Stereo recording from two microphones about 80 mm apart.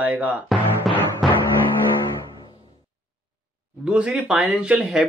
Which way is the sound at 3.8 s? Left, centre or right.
Centre.